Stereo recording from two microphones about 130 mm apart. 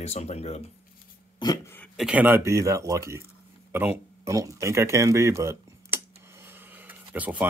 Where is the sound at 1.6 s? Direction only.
15° left (ahead or behind).